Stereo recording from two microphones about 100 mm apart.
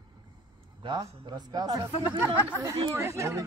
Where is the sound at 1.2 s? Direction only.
45° right (ahead or behind).